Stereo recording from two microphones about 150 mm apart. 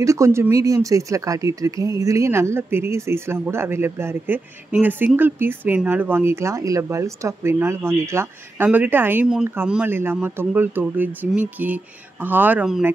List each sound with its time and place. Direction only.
0.0 s speech: 20° right (ahead or behind)